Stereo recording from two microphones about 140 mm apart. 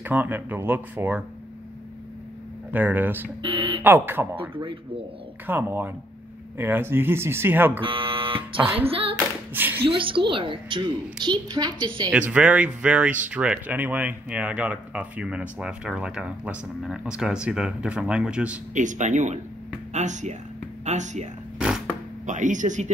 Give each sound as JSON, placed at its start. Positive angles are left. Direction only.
{"t": 0.0, "sound": "speech", "side_deg": -10}
{"t": 2.7, "sound": "speech", "side_deg": -15}
{"t": 3.4, "sound": "a woman's voice", "side_deg": -40}
{"t": 3.8, "sound": "speech", "side_deg": -15}
{"t": 4.4, "sound": "a woman's voice", "side_deg": -40}
{"t": 5.5, "sound": "speech", "side_deg": -15}
{"t": 7.8, "sound": "speech", "side_deg": -40}
{"t": 8.7, "sound": "clapping", "side_deg": -40}
{"t": 9.5, "sound": "speech", "side_deg": -15}
{"t": 9.8, "sound": "a woman's voice", "side_deg": -40}
{"t": 12.1, "sound": "speech", "side_deg": -10}
{"t": 18.8, "sound": "speech", "side_deg": -60}
{"t": 21.5, "sound": "creak", "side_deg": -5}
{"t": 22.2, "sound": "speech", "side_deg": -65}